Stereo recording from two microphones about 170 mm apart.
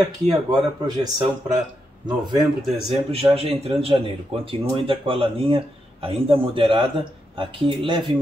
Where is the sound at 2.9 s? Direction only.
35° right (ahead or behind).